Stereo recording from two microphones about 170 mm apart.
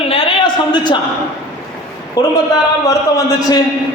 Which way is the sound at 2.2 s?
20° left (ahead or behind).